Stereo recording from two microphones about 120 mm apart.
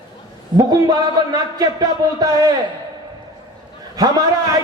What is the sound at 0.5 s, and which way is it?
A man's voice, 30° right (ahead or behind).